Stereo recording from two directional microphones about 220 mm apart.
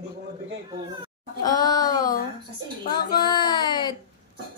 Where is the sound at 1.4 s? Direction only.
15° left (ahead or behind).